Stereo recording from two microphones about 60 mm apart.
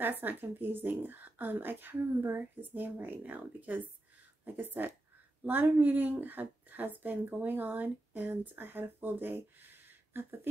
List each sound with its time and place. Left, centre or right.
0.0 s a woman's voice: right